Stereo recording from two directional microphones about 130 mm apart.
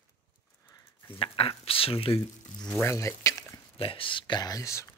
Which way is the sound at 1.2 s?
45° left (ahead or behind).